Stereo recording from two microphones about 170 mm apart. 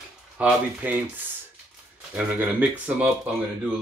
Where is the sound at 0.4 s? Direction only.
5° right (ahead or behind).